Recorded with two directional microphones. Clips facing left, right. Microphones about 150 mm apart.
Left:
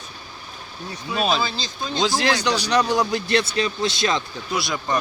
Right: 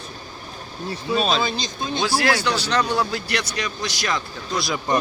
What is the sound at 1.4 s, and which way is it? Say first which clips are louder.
Speech: right 2 dB; 20° right (ahead or behind).